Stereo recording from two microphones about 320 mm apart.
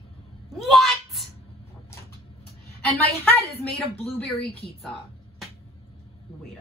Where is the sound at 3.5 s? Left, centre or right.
Centre.